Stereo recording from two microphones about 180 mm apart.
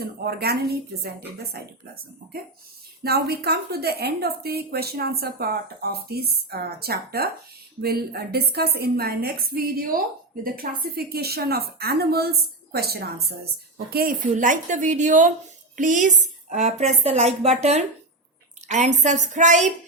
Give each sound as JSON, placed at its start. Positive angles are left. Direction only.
{"t": 0.0, "sound": "a woman's voice", "side_deg": -60}
{"t": 3.0, "sound": "a woman's voice", "side_deg": -60}